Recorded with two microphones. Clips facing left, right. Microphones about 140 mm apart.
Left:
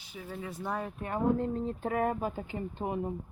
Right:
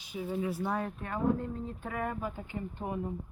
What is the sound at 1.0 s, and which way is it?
Speech, 25° left (ahead or behind).